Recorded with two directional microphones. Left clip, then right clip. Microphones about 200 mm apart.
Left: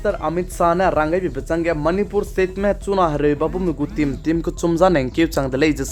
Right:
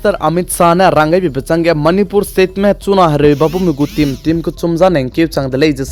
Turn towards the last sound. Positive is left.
turn(degrees=-25)  # may be behind; listen again after turning